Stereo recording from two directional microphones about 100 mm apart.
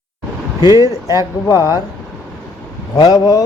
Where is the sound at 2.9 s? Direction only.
40° left (ahead or behind).